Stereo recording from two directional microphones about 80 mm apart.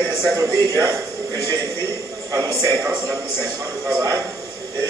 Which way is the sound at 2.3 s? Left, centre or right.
Right.